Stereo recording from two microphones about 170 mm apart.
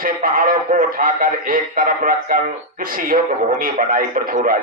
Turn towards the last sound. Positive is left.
turn(degrees=-55)  # may be behind; listen again after turning